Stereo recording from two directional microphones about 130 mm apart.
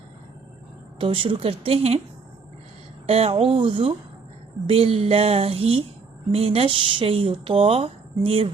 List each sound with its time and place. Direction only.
0.9 s speech: 40° right (ahead or behind)
3.1 s speech: 50° right (ahead or behind)